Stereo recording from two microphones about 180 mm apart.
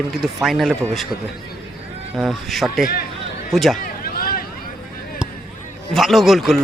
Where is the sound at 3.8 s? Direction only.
55° left (ahead or behind).